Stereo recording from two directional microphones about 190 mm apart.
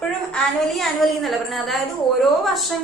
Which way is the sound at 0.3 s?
Centre (ahead or behind).